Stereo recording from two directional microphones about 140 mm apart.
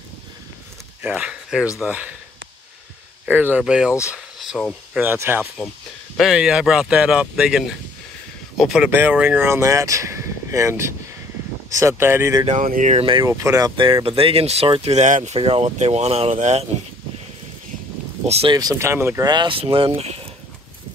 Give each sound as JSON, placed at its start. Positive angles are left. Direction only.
{"t": 1.0, "sound": "speech", "side_deg": -5}
{"t": 3.3, "sound": "speech", "side_deg": -10}
{"t": 5.0, "sound": "speech", "side_deg": -15}
{"t": 6.1, "sound": "speech", "side_deg": -5}
{"t": 12.5, "sound": "speech", "side_deg": -75}
{"t": 12.9, "sound": "speech", "side_deg": -40}
{"t": 13.2, "sound": "speech", "side_deg": -20}
{"t": 15.3, "sound": "speech", "side_deg": -45}
{"t": 18.2, "sound": "speech", "side_deg": -50}
{"t": 18.5, "sound": "speech", "side_deg": -25}
{"t": 19.2, "sound": "speech", "side_deg": -35}